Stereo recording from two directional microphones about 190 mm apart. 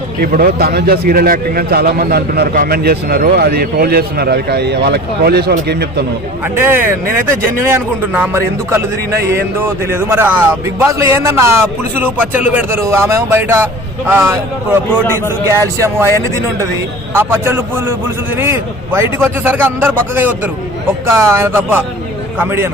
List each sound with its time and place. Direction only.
0.2 s speech: 50° right (ahead or behind)
6.6 s speech: 10° right (ahead or behind)
17.2 s speech: 10° right (ahead or behind)